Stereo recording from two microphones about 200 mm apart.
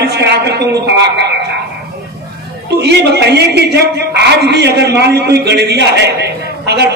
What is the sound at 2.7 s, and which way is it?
A man's voice, 55° right (ahead or behind).